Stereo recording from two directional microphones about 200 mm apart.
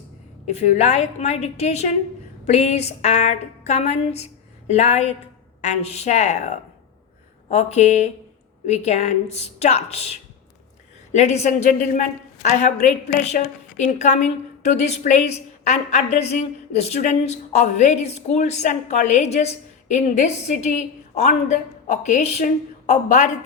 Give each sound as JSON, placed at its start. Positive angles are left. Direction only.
{"t": 0.4, "sound": "a woman's voice", "side_deg": 35}
{"t": 7.5, "sound": "a woman's voice", "side_deg": 35}